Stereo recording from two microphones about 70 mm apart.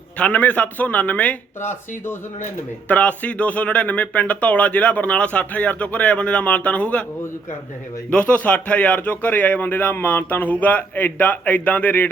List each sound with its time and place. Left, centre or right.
0.2 s speech: left
2.9 s speech: centre
8.1 s speech: centre